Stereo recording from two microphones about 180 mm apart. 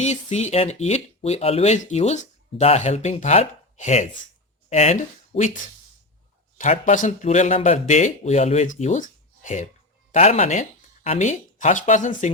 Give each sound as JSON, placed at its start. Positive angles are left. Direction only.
{"t": 0.0, "sound": "speech", "side_deg": 40}
{"t": 6.6, "sound": "speech", "side_deg": 45}